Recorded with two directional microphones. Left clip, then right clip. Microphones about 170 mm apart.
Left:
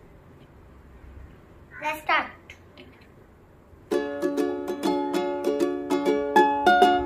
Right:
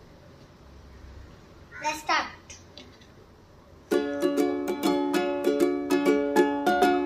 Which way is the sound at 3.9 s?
10° left (ahead or behind).